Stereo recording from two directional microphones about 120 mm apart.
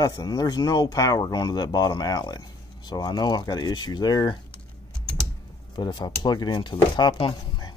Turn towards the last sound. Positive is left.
turn(degrees=40)  # may be behind; listen again after turning